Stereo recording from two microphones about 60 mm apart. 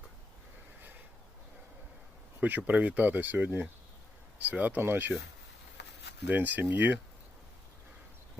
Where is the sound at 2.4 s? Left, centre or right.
Right.